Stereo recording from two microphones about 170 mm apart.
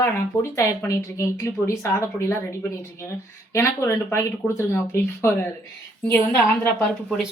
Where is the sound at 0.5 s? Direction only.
15° left (ahead or behind).